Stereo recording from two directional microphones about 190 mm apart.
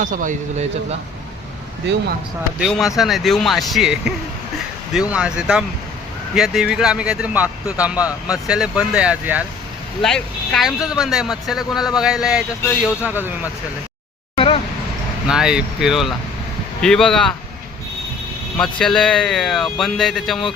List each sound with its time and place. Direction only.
0.0 s speech: 45° right (ahead or behind)
2.6 s speech: centre (ahead or behind)
14.3 s vehicle: 30° left (ahead or behind)
15.3 s speech: 5° right (ahead or behind)
18.5 s speech: 5° left (ahead or behind)